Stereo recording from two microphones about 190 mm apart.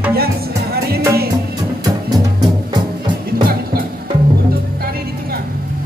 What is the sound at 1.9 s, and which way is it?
Music, 20° right (ahead or behind).